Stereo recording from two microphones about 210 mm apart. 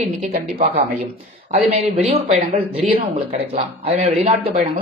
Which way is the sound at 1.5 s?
30° right (ahead or behind).